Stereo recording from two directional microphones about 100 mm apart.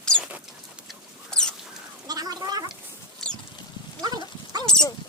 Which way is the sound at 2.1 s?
40° right (ahead or behind).